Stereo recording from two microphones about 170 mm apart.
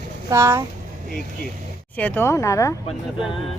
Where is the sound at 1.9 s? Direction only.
10° left (ahead or behind).